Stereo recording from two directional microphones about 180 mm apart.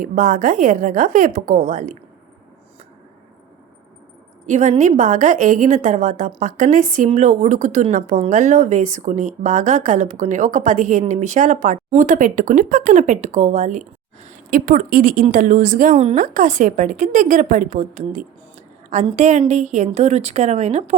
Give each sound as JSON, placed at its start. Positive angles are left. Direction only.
{"t": 0.0, "sound": "a woman's voice", "side_deg": -50}
{"t": 4.4, "sound": "a woman's voice", "side_deg": -40}